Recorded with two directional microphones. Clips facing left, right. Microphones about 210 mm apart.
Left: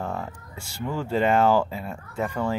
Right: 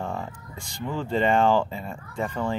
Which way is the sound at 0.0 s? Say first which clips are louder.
Left 1 dB; 5° left (ahead or behind).